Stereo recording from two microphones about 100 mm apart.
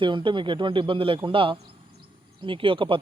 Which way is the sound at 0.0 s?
55° right (ahead or behind).